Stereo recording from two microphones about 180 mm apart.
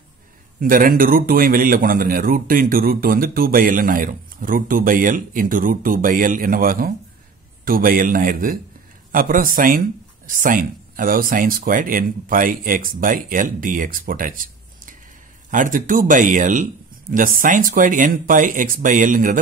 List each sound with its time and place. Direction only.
0.6 s a man's voice: 50° right (ahead or behind)